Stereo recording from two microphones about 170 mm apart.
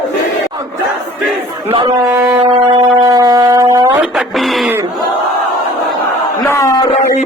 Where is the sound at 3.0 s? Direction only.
20° right (ahead or behind).